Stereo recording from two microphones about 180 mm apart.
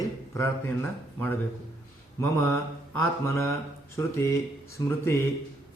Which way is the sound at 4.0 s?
15° left (ahead or behind).